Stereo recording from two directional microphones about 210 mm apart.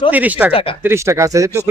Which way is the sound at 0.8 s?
15° right (ahead or behind).